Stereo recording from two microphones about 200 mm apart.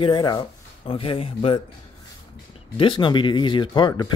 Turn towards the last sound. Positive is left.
turn(degrees=20)  # may be behind; listen again after turning